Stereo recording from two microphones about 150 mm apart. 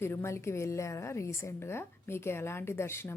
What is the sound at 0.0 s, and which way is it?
Speech, 15° left (ahead or behind).